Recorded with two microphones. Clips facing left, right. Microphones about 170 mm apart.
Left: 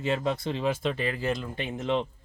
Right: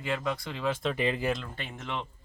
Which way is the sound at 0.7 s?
Centre (ahead or behind).